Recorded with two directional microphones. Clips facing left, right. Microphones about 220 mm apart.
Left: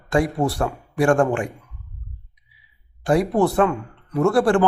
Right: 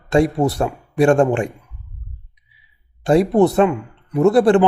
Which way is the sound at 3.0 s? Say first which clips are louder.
Right 5 dB; 25° right (ahead or behind).